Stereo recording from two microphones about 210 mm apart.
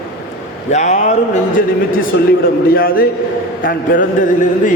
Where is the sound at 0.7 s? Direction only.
35° left (ahead or behind).